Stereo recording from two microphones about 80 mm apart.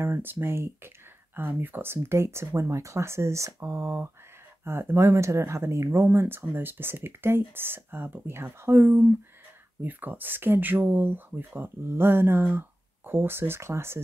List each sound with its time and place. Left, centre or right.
0.0 s speech: right